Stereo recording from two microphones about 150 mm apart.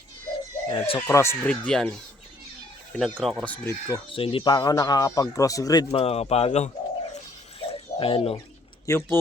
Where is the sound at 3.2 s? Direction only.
Centre (ahead or behind).